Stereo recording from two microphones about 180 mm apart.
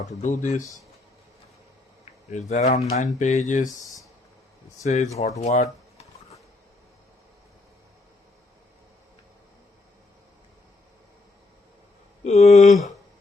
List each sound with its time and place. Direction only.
0.2 s speech: 40° left (ahead or behind)
2.3 s speech: 40° left (ahead or behind)
3.7 s speech: 20° left (ahead or behind)
4.8 s speech: 40° left (ahead or behind)
5.4 s a sound: 40° left (ahead or behind)
12.2 s speech: 35° left (ahead or behind)